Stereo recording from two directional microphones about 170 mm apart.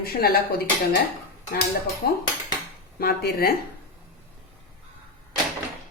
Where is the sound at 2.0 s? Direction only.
60° left (ahead or behind).